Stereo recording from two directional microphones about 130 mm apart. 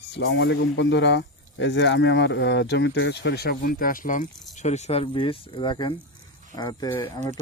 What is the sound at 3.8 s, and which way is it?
Speech, 90° left.